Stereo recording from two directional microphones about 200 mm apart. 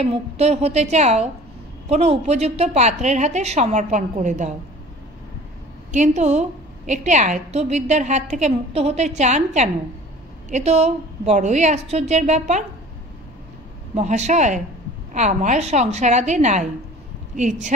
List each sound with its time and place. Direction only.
0.0 s a woman's voice: 30° right (ahead or behind)
5.9 s a woman's voice: 35° right (ahead or behind)
13.9 s a woman's voice: 35° right (ahead or behind)